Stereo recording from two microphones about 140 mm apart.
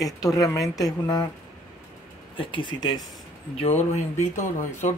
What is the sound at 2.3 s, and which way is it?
Speech, 35° left (ahead or behind).